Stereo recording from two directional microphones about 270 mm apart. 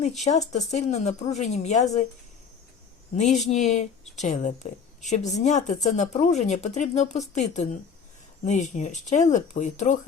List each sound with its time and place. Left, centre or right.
0.0 s speech: left
3.2 s speech: left